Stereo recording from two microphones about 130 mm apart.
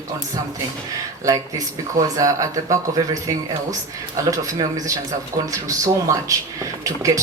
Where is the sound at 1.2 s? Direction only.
25° right (ahead or behind).